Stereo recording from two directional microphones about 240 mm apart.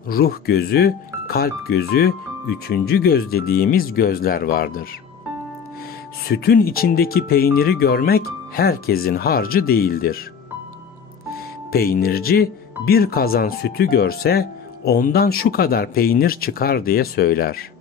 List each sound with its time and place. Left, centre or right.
0.1 s speech: left
6.2 s speech: left
11.7 s speech: left